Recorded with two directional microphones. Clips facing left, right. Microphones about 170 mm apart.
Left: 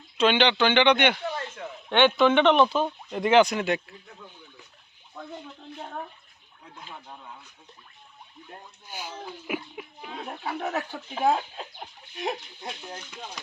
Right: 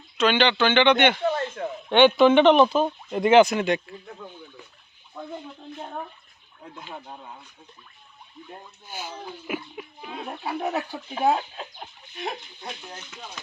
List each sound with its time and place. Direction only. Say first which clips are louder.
0.2 s speech: right 1 dB; 20° left (ahead or behind)
1.3 s a sound: right 7 dB; 45° right (ahead or behind)
1.9 s a man's voice: right 4 dB; 25° right (ahead or behind)
2.3 s speech: right 4 dB; 10° right (ahead or behind)
9.5 s speech: right 1 dB; 10° left (ahead or behind)
10.1 s speech: right 2 dB; 5° right (ahead or behind)